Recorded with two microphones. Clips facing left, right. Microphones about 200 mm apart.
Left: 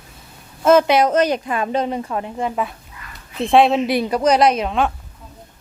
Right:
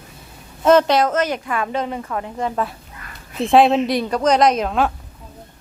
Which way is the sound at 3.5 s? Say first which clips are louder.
Even; centre (ahead or behind).